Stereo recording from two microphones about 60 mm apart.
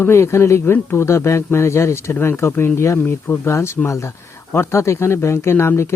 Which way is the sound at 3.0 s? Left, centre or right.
Left.